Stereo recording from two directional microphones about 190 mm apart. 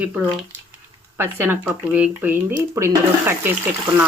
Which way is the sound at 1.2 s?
10° right (ahead or behind).